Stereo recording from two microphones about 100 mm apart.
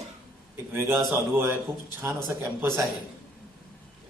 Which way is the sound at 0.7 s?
25° right (ahead or behind).